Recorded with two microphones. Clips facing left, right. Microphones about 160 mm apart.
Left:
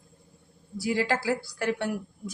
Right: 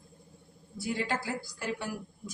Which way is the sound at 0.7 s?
90° left.